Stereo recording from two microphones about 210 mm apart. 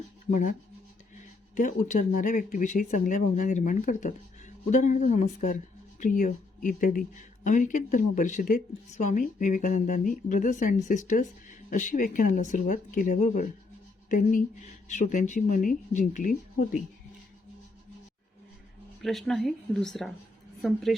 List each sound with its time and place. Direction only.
1.5 s speech: 35° left (ahead or behind)
19.0 s a woman's voice: centre (ahead or behind)